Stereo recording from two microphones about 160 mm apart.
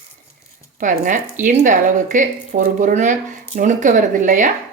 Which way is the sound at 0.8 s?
50° right (ahead or behind).